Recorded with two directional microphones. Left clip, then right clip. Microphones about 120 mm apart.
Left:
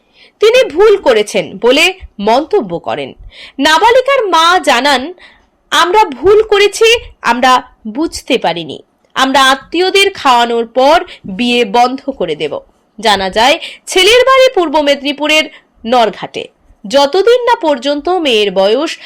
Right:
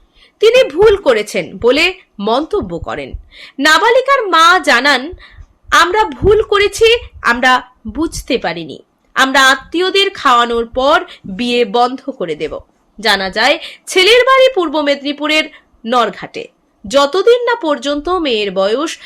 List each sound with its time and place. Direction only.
0.2 s a woman's voice: 20° left (ahead or behind)